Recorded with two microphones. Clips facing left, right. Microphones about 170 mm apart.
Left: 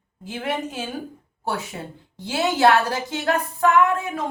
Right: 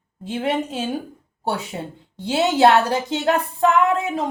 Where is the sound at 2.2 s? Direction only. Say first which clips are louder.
Right 3 dB; 25° right (ahead or behind).